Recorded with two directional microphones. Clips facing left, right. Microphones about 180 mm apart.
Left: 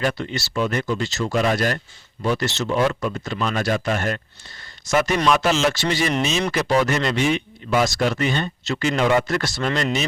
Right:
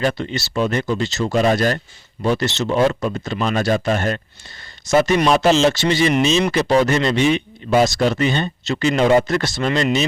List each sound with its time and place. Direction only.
0.0 s speech: 25° right (ahead or behind)